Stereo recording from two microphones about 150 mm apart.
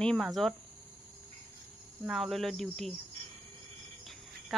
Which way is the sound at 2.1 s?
Centre (ahead or behind).